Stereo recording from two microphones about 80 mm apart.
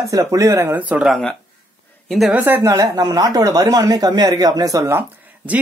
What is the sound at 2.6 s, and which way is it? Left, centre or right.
Speech, right.